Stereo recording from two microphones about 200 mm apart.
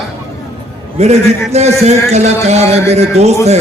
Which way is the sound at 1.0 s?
35° right (ahead or behind).